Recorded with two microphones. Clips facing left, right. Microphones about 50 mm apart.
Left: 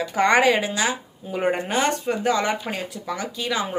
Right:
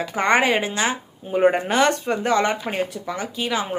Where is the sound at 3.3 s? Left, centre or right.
Right.